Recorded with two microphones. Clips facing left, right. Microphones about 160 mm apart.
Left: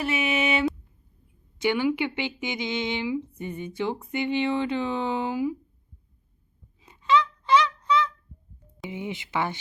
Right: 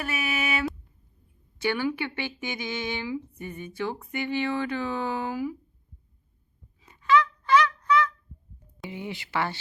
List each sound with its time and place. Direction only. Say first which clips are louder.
0.0 s a sound: left 5 dB; 25° left (ahead or behind)
1.5 s speech: left 3 dB; 15° left (ahead or behind)
6.7 s fowl: even; 20° left (ahead or behind)
8.9 s speech: left 2 dB; 20° left (ahead or behind)